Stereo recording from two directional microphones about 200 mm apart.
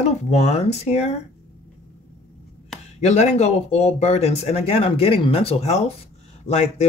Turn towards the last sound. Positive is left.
turn(degrees=35)  # may be behind; listen again after turning